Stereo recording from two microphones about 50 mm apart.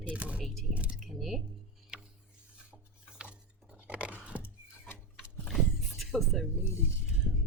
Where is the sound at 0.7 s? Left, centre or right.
Right.